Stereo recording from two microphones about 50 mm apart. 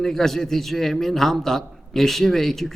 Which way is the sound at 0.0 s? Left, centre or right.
Centre.